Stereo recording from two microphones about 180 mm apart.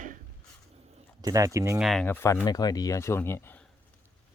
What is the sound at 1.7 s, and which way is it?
Speech, centre (ahead or behind).